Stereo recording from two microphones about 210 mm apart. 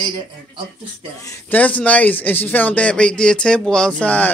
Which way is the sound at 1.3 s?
10° left (ahead or behind).